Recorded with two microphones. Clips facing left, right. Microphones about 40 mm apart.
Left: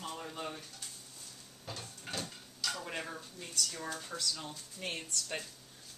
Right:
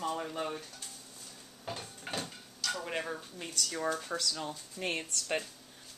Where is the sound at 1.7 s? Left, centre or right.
Right.